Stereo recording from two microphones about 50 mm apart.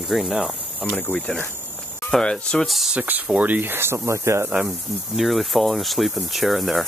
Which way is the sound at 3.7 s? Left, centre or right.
Right.